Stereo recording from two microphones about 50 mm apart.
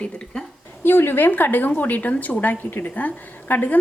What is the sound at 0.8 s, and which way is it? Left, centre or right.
A woman's voice, left.